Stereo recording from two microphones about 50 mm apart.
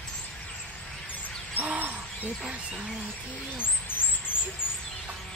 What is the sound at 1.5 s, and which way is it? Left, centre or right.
Bird, right.